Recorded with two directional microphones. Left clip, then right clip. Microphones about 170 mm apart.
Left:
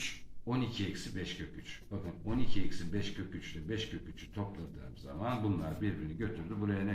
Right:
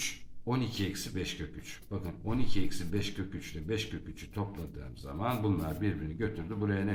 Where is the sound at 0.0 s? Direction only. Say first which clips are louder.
Right 4 dB; 45° right (ahead or behind).